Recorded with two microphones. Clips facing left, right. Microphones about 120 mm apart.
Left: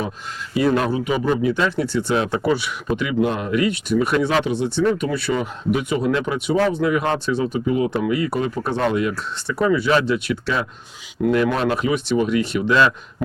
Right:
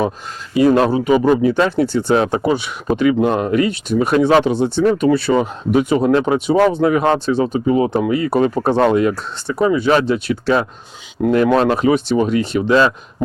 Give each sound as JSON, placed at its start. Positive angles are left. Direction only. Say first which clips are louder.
{"t": 0.8, "sound": "speech", "louder": "right 7 dB", "side_deg": -30}
{"t": 1.7, "sound": "speech", "louder": "right 5 dB", "side_deg": -30}
{"t": 2.3, "sound": "speech", "louder": "right 3 dB", "side_deg": -20}
{"t": 2.9, "sound": "speech", "louder": "right 6 dB", "side_deg": -35}
{"t": 9.6, "sound": "speech", "louder": "right 3 dB", "side_deg": -20}
{"t": 9.8, "sound": "speech", "louder": "right 4 dB", "side_deg": -35}